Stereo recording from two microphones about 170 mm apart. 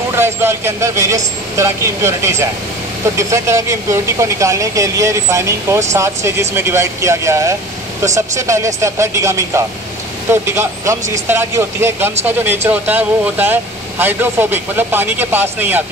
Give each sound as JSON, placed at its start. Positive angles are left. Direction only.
{"t": 0.1, "sound": "speech", "side_deg": -15}